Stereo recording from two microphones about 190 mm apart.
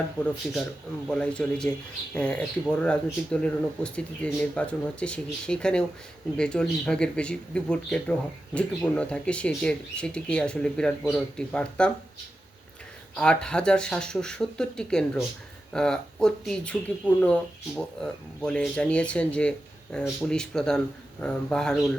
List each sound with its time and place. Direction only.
1.0 s speech: 5° left (ahead or behind)
13.1 s speech: 5° left (ahead or behind)